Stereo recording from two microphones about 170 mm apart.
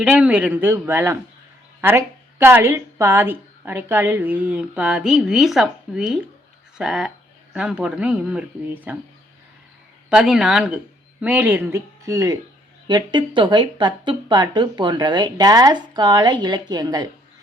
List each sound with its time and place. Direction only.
0.0 s speech: 10° right (ahead or behind)
10.1 s speech: 5° right (ahead or behind); by 17.1 s 25° right (ahead or behind)